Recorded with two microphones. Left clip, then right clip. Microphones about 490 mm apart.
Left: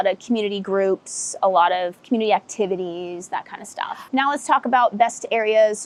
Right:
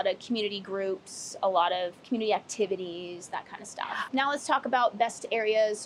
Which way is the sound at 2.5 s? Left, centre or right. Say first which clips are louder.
Left 7 dB; left.